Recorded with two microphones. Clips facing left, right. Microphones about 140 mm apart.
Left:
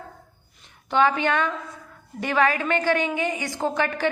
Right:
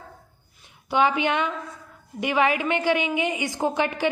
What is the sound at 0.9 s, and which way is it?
A woman's voice, 15° right (ahead or behind).